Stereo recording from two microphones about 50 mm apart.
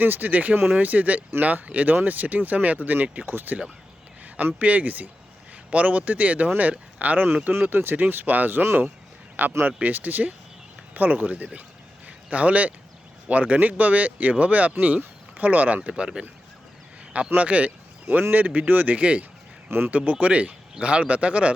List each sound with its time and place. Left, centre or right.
0.0 s speech: right
4.6 s speech: right
7.5 s speech: right
12.0 s a sound: right
13.2 s speech: right
15.9 s speech: centre
18.1 s speech: right
18.9 s speech: right